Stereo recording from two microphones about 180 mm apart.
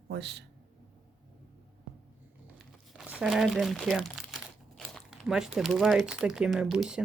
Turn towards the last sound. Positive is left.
turn(degrees=-5)  # may be behind; listen again after turning